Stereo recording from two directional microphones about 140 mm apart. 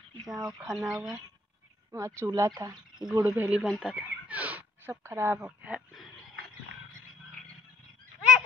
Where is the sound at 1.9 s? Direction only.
20° right (ahead or behind).